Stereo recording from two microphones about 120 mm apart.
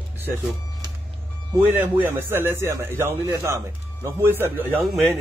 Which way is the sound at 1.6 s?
15° right (ahead or behind).